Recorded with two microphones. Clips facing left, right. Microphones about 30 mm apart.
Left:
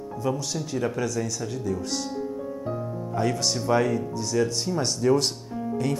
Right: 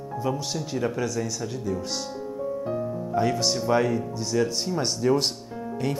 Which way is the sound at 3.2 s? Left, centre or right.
Centre.